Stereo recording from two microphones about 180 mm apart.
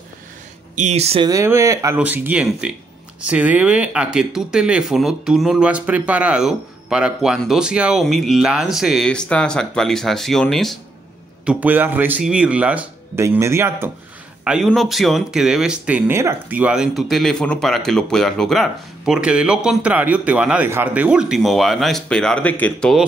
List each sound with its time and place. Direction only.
0.7 s speech: 40° right (ahead or behind)
1.2 s speech: 15° right (ahead or behind); by 10.8 s centre (ahead or behind)
11.4 s speech: 10° right (ahead or behind)